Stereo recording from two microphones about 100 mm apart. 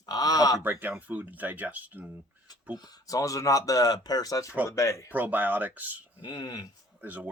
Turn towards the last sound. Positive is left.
turn(degrees=-15)  # may be behind; listen again after turning